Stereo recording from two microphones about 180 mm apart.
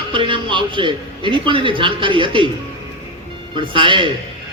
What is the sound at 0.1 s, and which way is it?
A man's voice, 30° right (ahead or behind).